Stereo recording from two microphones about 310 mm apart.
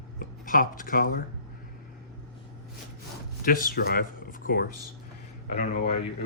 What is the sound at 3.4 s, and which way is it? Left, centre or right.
Speech, left.